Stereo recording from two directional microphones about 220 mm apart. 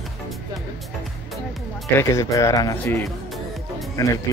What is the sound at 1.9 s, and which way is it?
Speech, 15° left (ahead or behind).